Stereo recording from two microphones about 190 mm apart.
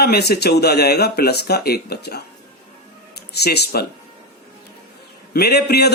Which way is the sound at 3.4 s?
60° left (ahead or behind).